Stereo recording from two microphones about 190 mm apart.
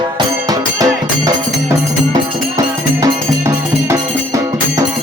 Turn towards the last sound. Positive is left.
turn(degrees=-15)  # may be behind; listen again after turning